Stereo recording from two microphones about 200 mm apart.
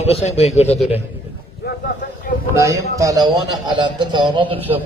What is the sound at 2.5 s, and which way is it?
A man's voice, 15° right (ahead or behind).